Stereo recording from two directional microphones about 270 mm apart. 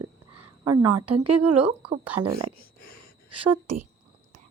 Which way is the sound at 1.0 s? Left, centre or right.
Right.